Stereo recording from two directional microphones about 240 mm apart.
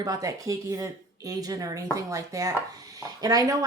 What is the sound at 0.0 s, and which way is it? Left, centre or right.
Speech, centre.